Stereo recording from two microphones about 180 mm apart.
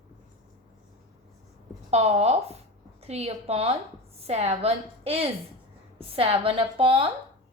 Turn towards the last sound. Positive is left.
turn(degrees=-30)  # may be behind; listen again after turning